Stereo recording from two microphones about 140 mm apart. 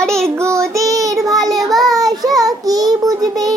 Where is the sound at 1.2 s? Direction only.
Centre (ahead or behind).